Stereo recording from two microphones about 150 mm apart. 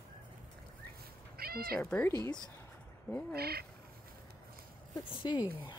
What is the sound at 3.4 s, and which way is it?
Speech, 90° right.